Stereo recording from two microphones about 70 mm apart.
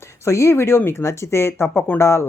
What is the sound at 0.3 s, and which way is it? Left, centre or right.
Speech, left.